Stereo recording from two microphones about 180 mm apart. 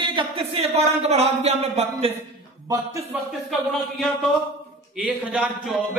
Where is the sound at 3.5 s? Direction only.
Centre (ahead or behind).